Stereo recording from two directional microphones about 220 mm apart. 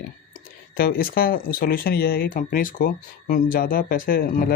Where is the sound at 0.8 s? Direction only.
45° left (ahead or behind).